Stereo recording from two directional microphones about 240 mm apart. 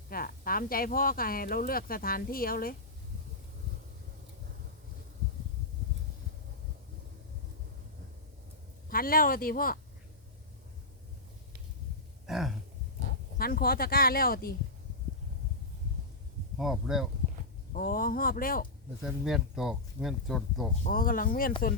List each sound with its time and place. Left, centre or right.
0.1 s speech: left
8.9 s speech: left
12.2 s a sound: centre
13.4 s speech: left
16.6 s speech: centre
17.7 s speech: left
19.0 s speech: centre
20.8 s speech: left